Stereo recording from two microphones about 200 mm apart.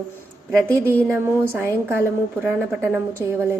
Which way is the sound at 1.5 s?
10° right (ahead or behind).